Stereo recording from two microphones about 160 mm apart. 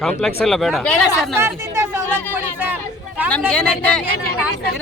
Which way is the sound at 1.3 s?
15° right (ahead or behind).